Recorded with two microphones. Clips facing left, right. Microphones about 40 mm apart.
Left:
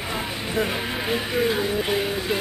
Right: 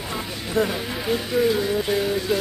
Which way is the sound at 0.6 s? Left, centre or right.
Left.